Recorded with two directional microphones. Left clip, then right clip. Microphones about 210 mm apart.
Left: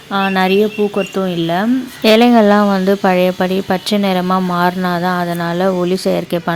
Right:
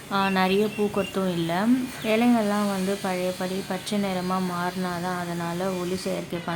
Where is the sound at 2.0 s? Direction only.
50° left (ahead or behind).